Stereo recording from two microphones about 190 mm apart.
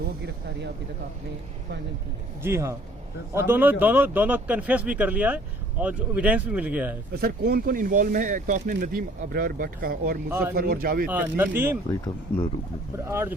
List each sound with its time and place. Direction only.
2.4 s speech: 15° right (ahead or behind)
7.1 s speech: 55° right (ahead or behind)
11.1 s speech: 10° right (ahead or behind)
11.9 s speech: 20° left (ahead or behind)
13.1 s speech: 15° right (ahead or behind)